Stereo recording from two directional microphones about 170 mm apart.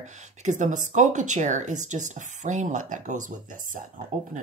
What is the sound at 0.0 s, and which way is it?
Speech, 45° right (ahead or behind).